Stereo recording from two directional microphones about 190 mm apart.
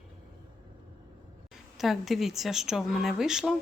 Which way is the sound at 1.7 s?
Centre (ahead or behind).